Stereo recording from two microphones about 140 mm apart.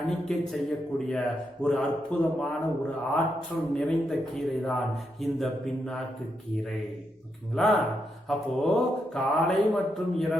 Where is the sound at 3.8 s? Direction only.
5° left (ahead or behind).